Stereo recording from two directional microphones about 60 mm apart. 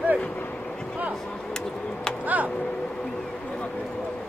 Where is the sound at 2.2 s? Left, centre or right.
Right.